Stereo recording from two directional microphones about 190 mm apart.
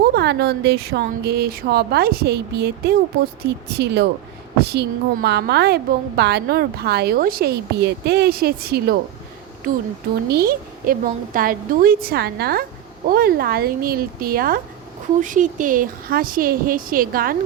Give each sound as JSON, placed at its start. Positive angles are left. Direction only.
{"t": 0.1, "sound": "a woman's voice", "side_deg": -60}
{"t": 10.2, "sound": "a woman's voice", "side_deg": -55}